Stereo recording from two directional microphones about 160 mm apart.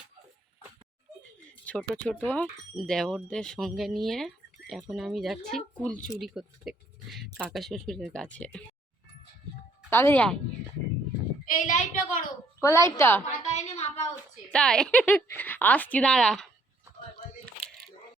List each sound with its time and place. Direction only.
1.7 s a sound: 10° left (ahead or behind)
2.0 s a woman's voice: 5° left (ahead or behind)
9.9 s a woman's voice: 15° left (ahead or behind)
11.4 s a woman's voice: 55° left (ahead or behind)
12.6 s a woman's voice: 20° left (ahead or behind)
13.2 s a woman's voice: 45° left (ahead or behind)
14.5 s a woman's voice: 5° left (ahead or behind)